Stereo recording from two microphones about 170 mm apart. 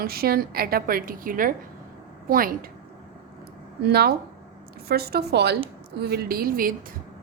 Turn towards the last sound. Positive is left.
turn(degrees=-60)  # may be behind; listen again after turning